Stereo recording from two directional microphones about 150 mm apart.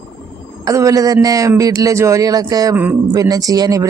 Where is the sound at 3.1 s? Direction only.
25° right (ahead or behind).